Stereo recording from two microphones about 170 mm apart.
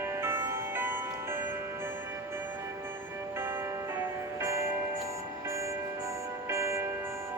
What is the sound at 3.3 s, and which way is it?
Music, 15° right (ahead or behind).